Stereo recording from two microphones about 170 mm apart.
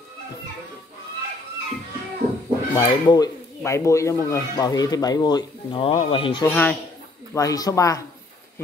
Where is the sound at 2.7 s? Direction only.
20° left (ahead or behind).